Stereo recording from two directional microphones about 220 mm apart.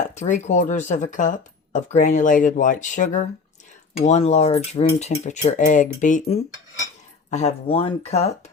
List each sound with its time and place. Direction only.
0.1 s speech: 30° left (ahead or behind)